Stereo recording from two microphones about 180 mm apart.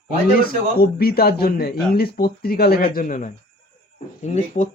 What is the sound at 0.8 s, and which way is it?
Speech, 60° left (ahead or behind).